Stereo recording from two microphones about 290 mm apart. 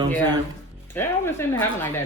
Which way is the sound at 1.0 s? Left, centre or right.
Centre.